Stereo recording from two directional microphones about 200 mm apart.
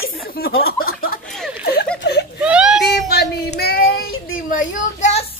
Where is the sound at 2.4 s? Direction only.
5° right (ahead or behind).